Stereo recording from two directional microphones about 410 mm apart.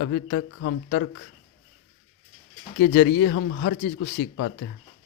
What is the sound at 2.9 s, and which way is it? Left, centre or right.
Speech, left.